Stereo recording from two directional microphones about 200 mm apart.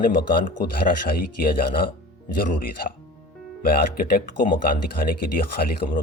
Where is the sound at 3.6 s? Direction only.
45° left (ahead or behind).